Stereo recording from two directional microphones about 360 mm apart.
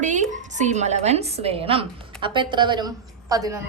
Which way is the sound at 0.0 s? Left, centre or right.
Centre.